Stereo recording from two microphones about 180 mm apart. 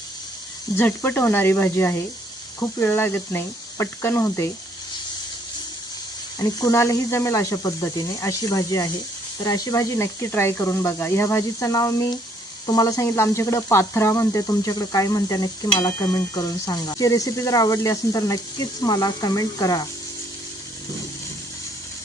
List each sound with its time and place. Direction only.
0.8 s speech: 10° left (ahead or behind)
6.4 s speech: 20° left (ahead or behind)